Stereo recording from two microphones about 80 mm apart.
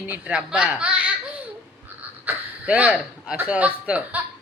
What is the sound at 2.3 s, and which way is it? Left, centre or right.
Speech, right.